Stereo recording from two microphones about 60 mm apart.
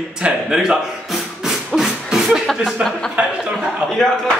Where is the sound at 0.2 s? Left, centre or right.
Centre.